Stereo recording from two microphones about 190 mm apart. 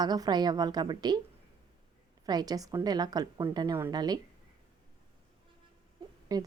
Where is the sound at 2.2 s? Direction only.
20° right (ahead or behind).